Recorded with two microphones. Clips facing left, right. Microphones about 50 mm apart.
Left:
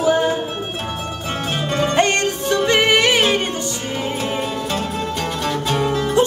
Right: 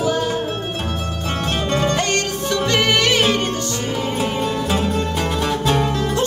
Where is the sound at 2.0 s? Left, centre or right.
Left.